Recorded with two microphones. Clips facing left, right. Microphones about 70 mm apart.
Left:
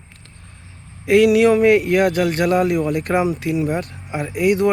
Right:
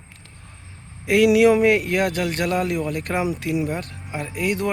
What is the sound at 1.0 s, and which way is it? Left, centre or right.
Speech, centre.